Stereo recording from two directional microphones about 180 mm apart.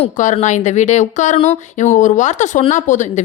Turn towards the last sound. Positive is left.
turn(degrees=45)  # may be behind; listen again after turning